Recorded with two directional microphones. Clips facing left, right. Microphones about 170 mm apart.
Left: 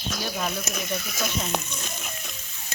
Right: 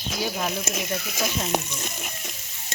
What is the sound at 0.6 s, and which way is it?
Speech, 25° right (ahead or behind).